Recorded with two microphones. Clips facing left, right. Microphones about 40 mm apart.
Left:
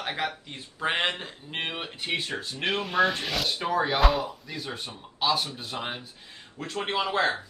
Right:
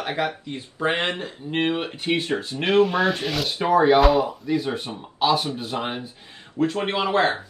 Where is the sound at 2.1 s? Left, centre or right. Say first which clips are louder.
Right 7 dB; centre.